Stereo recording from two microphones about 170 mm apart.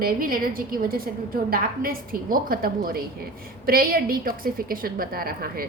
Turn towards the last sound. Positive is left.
turn(degrees=-60)  # may be behind; listen again after turning